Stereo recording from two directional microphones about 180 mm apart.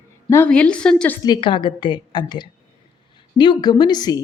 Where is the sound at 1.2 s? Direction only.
25° left (ahead or behind).